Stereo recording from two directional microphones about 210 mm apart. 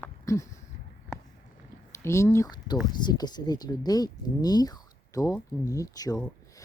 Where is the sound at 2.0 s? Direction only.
15° left (ahead or behind).